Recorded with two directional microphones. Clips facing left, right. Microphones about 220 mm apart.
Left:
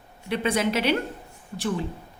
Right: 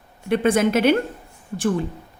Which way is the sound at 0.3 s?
50° right (ahead or behind).